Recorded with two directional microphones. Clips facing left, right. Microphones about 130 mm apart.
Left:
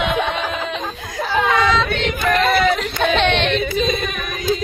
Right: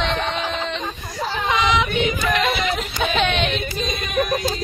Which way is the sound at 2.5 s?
Centre (ahead or behind).